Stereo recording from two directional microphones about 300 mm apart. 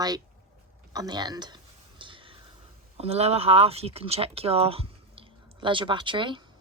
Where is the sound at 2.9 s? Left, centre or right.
Centre.